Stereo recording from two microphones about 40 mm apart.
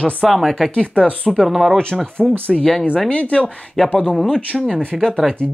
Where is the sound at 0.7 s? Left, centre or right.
Left.